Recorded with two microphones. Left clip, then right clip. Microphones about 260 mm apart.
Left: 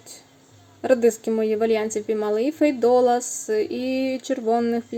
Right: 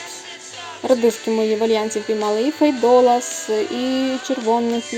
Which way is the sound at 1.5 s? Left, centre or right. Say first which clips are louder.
Right 3 dB; centre.